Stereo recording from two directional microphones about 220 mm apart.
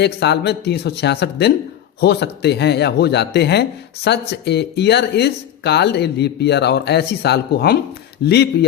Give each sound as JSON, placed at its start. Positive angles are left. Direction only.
{"t": 0.0, "sound": "speech", "side_deg": 50}